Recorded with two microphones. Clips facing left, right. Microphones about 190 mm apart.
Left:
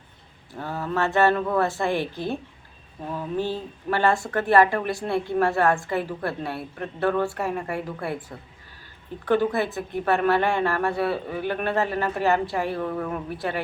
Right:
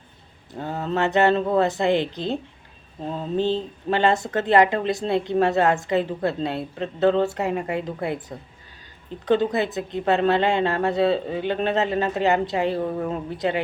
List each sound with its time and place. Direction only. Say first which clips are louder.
0.5 s speech: right 2 dB; 20° right (ahead or behind)
9.2 s speech: right 1 dB; 20° right (ahead or behind)